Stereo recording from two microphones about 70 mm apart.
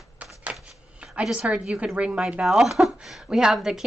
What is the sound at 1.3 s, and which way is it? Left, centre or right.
A woman's voice, centre.